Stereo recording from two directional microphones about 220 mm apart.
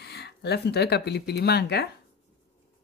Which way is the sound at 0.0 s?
50° left (ahead or behind).